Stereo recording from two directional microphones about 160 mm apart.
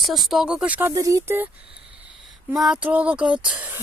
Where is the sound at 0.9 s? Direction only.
20° right (ahead or behind).